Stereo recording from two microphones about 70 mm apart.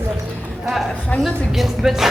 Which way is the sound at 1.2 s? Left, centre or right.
Centre.